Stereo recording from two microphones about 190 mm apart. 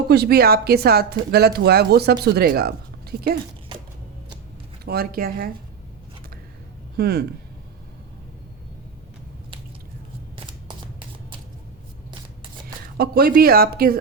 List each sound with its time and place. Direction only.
0.1 s speech: 55° right (ahead or behind)
4.9 s speech: 50° right (ahead or behind)
6.9 s speech: 55° right (ahead or behind)
13.0 s speech: 55° right (ahead or behind)